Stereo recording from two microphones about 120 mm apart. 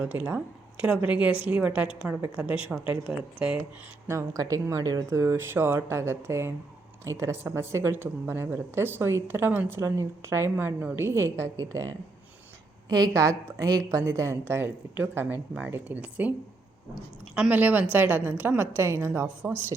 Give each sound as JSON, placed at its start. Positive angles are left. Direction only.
{"t": 0.0, "sound": "a woman's voice", "side_deg": -15}
{"t": 4.0, "sound": "speech", "side_deg": -20}
{"t": 12.9, "sound": "speech", "side_deg": -30}
{"t": 17.3, "sound": "a woman's voice", "side_deg": -10}